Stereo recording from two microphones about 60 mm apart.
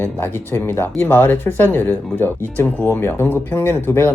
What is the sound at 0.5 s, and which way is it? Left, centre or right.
Speech, left.